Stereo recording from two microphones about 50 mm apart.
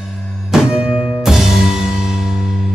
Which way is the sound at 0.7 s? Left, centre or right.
Centre.